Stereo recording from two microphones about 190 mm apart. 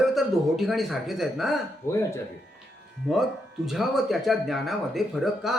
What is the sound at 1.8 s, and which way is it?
Speech, 15° left (ahead or behind).